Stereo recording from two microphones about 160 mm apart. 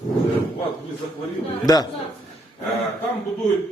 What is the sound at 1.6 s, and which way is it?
Speech, 25° left (ahead or behind).